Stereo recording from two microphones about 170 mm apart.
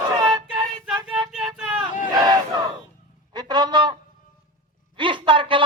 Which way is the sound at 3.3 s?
25° right (ahead or behind).